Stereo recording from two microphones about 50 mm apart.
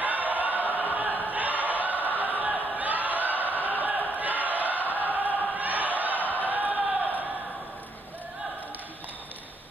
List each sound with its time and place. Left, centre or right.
0.0 s chant: right
1.3 s crowd: right
2.5 s a sound: right
6.3 s crowd: right